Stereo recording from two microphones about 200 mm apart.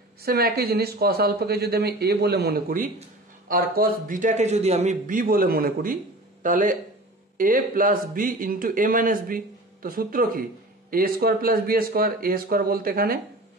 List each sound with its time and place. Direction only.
0.2 s speech: 50° right (ahead or behind)